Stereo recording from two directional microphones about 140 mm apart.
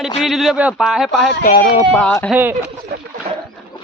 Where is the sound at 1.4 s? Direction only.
70° left (ahead or behind).